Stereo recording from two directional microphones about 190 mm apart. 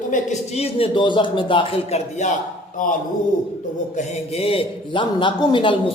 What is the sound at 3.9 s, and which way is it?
A man's voice, 35° left (ahead or behind).